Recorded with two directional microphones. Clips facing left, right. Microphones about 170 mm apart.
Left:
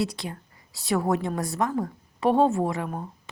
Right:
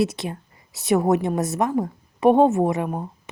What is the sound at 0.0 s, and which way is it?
A woman's voice, 20° right (ahead or behind).